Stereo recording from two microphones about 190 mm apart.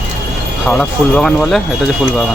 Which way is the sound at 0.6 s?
5° left (ahead or behind).